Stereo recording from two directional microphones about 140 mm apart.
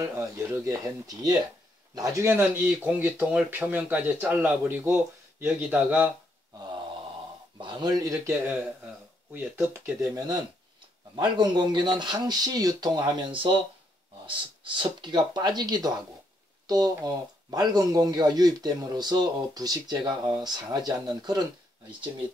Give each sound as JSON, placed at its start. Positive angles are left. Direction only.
{"t": 0.2, "sound": "speech", "side_deg": -20}
{"t": 6.6, "sound": "mantra", "side_deg": -35}
{"t": 7.5, "sound": "speech", "side_deg": -30}
{"t": 10.0, "sound": "speech", "side_deg": -25}